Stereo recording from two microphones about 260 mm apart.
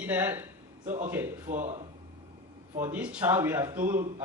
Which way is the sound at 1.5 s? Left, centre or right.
Right.